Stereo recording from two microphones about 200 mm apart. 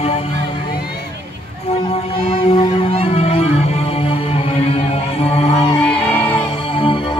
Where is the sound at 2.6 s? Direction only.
30° left (ahead or behind).